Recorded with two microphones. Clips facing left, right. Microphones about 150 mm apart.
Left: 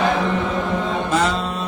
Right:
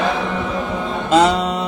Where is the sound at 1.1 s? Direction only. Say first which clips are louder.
Right 9 dB; 20° right (ahead or behind).